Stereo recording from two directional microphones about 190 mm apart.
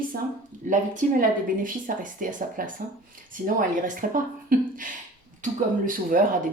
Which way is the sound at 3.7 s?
45° right (ahead or behind).